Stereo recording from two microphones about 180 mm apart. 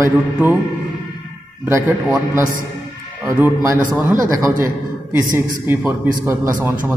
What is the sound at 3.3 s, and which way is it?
Speech, 15° right (ahead or behind).